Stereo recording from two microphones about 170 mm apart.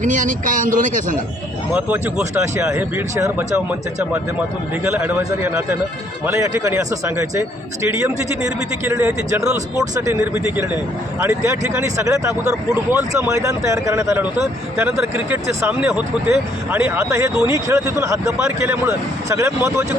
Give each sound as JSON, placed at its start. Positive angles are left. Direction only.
{"t": 0.0, "sound": "speech", "side_deg": -50}
{"t": 1.7, "sound": "speech", "side_deg": -10}
{"t": 8.8, "sound": "speech", "side_deg": -15}
{"t": 9.4, "sound": "speech", "side_deg": -5}
{"t": 9.9, "sound": "speech", "side_deg": -15}